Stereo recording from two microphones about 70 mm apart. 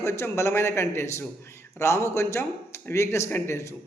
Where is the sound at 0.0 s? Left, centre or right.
Left.